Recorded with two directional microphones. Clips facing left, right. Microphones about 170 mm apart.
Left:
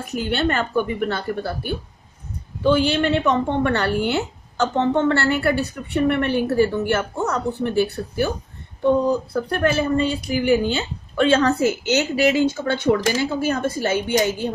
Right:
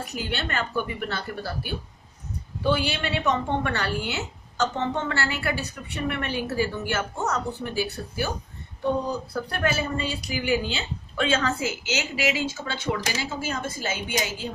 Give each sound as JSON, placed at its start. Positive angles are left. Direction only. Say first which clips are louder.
{"t": 0.0, "sound": "speech", "louder": "left 9 dB", "side_deg": 50}
{"t": 2.8, "sound": "speech", "louder": "left 8 dB", "side_deg": 50}
{"t": 9.3, "sound": "speech", "louder": "left 6 dB", "side_deg": 50}
{"t": 11.4, "sound": "speech", "louder": "left 9 dB", "side_deg": 60}